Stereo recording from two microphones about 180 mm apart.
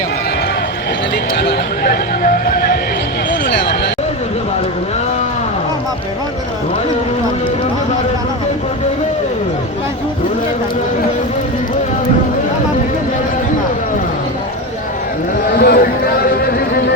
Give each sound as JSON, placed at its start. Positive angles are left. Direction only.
{"t": 1.4, "sound": "neigh", "side_deg": 65}
{"t": 15.4, "sound": "speech", "side_deg": 60}
{"t": 16.5, "sound": "music", "side_deg": 55}